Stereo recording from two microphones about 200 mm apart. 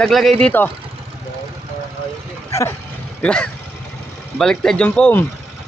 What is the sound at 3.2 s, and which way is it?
Speech, 5° left (ahead or behind).